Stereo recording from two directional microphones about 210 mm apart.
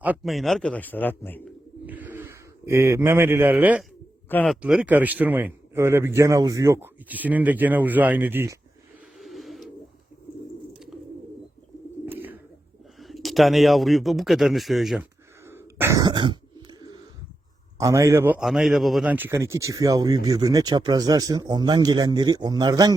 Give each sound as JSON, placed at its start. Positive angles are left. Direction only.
{"t": 0.0, "sound": "a man's voice", "side_deg": -5}
{"t": 1.9, "sound": "speech", "side_deg": -10}
{"t": 4.3, "sound": "a man's voice", "side_deg": 10}
{"t": 4.6, "sound": "a man's voice", "side_deg": -5}
{"t": 9.1, "sound": "a sound", "side_deg": 0}
{"t": 12.0, "sound": "bird", "side_deg": -10}
{"t": 13.0, "sound": "speech", "side_deg": 0}
{"t": 15.4, "sound": "throat clearing", "side_deg": -10}
{"t": 17.7, "sound": "a man's voice", "side_deg": -15}